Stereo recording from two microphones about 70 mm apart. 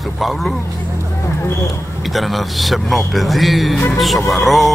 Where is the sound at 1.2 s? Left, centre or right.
Left.